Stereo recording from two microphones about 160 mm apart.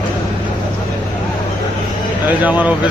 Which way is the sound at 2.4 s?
10° right (ahead or behind).